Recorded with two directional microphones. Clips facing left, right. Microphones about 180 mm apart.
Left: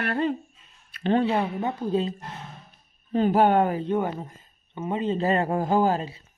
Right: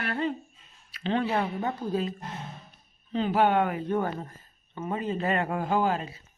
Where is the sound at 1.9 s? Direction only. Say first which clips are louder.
Left 5 dB; 25° left (ahead or behind).